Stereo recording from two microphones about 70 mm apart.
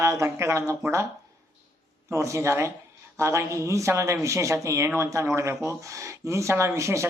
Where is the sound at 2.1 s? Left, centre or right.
Right.